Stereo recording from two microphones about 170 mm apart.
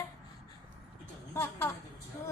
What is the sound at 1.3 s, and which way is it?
Speech, 15° left (ahead or behind).